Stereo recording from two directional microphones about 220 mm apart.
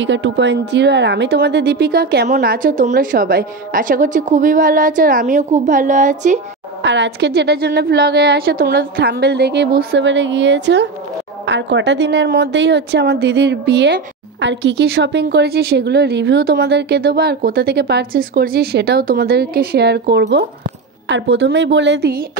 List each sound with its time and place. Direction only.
0.0 s a woman's voice: 55° right (ahead or behind); by 6.4 s 35° right (ahead or behind)
6.8 s speech: 55° right (ahead or behind)